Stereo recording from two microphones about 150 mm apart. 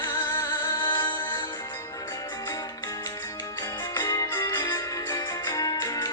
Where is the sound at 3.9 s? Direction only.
25° left (ahead or behind).